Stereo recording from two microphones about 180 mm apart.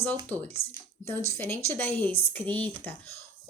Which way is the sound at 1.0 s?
15° left (ahead or behind).